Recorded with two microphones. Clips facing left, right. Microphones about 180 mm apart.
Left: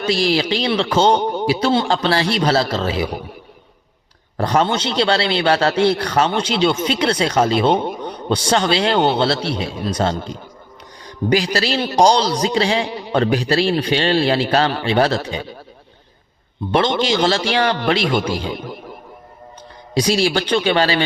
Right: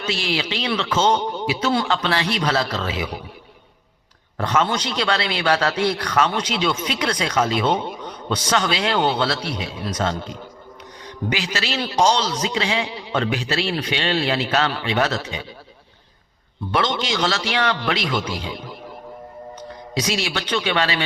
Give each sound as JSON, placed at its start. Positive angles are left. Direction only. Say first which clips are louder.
{"t": 0.0, "sound": "a man's voice", "louder": "left 7 dB", "side_deg": 35}
{"t": 1.2, "sound": "a sound", "louder": "left 5 dB", "side_deg": 50}
{"t": 1.5, "sound": "a man's voice", "louder": "left 4 dB", "side_deg": 35}
{"t": 4.4, "sound": "a man's voice", "louder": "left 4 dB", "side_deg": 35}
{"t": 7.7, "sound": "a man's voice", "louder": "left 5 dB", "side_deg": 50}
{"t": 8.0, "sound": "a man's voice", "louder": "left 5 dB", "side_deg": 30}
{"t": 9.1, "sound": "a man's voice", "louder": "left 5 dB", "side_deg": 30}
{"t": 11.3, "sound": "a man's voice", "louder": "left 8 dB", "side_deg": 35}
{"t": 17.2, "sound": "a man's voice", "louder": "left 5 dB", "side_deg": 30}
{"t": 18.4, "sound": "a man's voice", "louder": "left 5 dB", "side_deg": 50}
{"t": 19.9, "sound": "a man's voice", "louder": "left 7 dB", "side_deg": 30}